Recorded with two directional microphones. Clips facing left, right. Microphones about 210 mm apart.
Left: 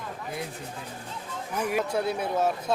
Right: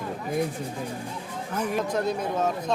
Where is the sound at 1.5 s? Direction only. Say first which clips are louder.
Even; 10° left (ahead or behind).